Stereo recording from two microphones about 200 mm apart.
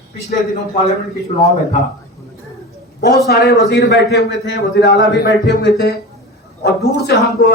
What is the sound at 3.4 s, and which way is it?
A man's voice, 50° left (ahead or behind).